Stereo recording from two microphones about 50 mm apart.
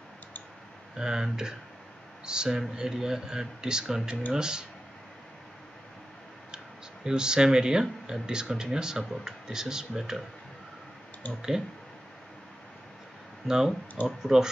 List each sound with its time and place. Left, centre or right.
0.9 s speech: centre
7.1 s speech: centre
13.5 s speech: centre